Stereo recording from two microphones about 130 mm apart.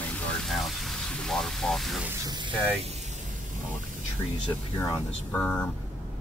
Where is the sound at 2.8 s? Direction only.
55° right (ahead or behind).